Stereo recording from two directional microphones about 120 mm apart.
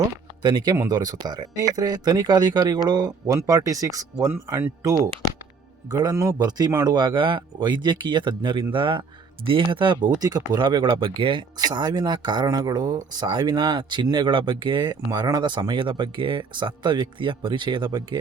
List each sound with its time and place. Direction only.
0.4 s speech: 35° right (ahead or behind)
6.9 s speech: 40° right (ahead or behind)